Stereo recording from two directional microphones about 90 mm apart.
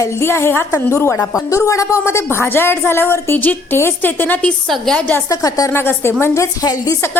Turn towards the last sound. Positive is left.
turn(degrees=45)  # may be behind; listen again after turning